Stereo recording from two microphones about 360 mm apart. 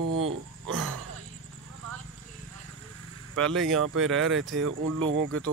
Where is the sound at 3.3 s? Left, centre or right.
Centre.